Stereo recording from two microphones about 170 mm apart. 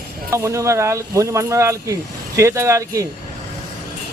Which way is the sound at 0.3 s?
15° right (ahead or behind).